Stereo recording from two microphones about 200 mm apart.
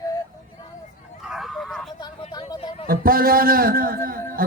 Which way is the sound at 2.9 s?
45° right (ahead or behind).